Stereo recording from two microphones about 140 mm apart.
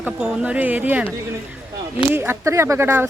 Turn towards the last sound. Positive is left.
turn(degrees=-15)  # may be behind; listen again after turning